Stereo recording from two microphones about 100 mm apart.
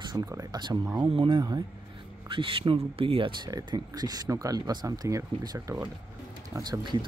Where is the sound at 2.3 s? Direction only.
60° right (ahead or behind).